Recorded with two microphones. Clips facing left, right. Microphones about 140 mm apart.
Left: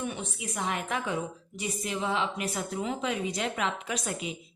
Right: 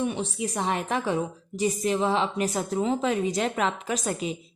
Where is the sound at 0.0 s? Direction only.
35° right (ahead or behind).